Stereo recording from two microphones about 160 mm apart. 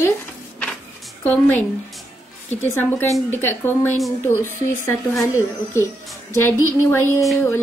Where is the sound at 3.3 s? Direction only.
15° left (ahead or behind).